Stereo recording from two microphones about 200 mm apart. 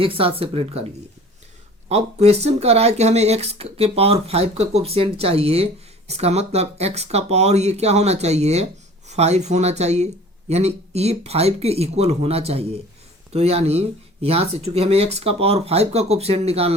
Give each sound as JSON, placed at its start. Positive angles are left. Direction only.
{"t": 0.0, "sound": "speech", "side_deg": -25}
{"t": 1.9, "sound": "speech", "side_deg": -30}